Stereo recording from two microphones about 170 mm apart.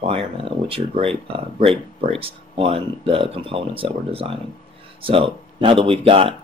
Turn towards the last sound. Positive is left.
turn(degrees=-30)  # may be behind; listen again after turning